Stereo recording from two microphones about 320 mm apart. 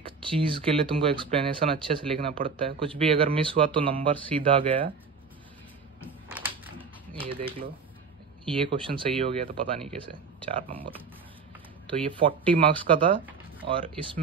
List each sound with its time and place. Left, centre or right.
0.0 s speech: centre
5.9 s a sound: centre
6.8 s typewriter: centre
8.5 s speech: centre
10.7 s speech: centre
12.1 s speech: centre